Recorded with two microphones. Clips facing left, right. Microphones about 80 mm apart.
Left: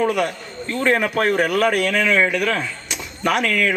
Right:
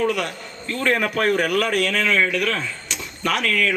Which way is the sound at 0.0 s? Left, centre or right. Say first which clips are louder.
Left 3 dB; centre.